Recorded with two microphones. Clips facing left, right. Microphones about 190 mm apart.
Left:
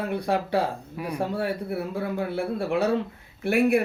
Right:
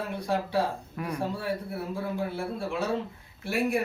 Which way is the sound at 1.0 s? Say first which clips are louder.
Left 2 dB; 10° left (ahead or behind).